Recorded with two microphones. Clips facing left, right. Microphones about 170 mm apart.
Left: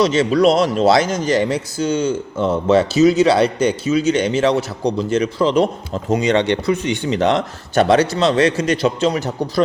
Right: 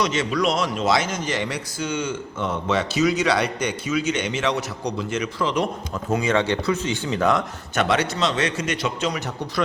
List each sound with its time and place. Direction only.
0.0 s speech: 30° left (ahead or behind)
6.7 s speech: 65° left (ahead or behind)
7.2 s speech: 25° left (ahead or behind)